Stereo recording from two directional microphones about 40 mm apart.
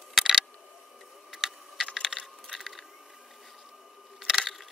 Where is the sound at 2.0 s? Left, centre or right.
Centre.